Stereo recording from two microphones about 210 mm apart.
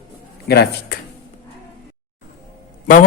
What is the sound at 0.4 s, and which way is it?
Speech, 50° left (ahead or behind).